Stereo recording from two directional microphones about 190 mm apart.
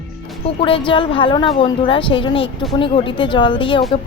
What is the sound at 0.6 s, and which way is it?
A woman's voice, 25° left (ahead or behind).